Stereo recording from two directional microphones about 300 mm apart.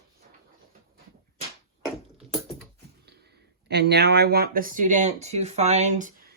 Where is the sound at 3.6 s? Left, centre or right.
Right.